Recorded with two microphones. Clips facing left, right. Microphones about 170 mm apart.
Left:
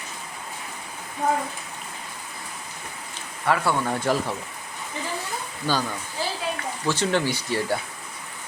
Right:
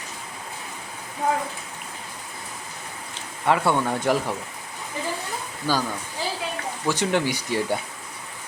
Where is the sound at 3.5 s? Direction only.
20° right (ahead or behind).